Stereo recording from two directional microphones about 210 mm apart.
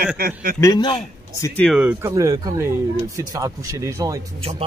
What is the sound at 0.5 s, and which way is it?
Speech, 15° left (ahead or behind).